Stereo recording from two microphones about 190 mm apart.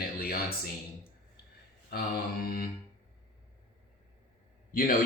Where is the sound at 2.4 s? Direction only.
50° left (ahead or behind).